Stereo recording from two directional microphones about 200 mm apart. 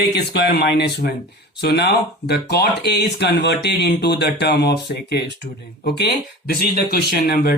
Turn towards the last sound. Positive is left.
turn(degrees=50)  # may be behind; listen again after turning